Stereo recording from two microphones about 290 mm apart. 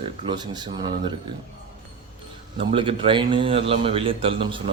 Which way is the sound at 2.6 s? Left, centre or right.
Centre.